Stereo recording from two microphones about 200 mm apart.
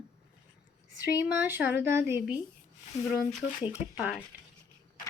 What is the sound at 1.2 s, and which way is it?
Speech, 10° right (ahead or behind).